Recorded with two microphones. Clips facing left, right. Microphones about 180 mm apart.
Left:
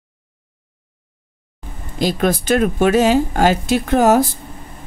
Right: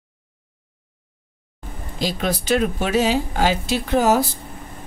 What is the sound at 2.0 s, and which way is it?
Speech, 50° left (ahead or behind).